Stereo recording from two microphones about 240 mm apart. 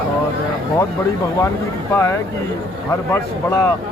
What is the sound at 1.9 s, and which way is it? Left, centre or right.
Speech, centre.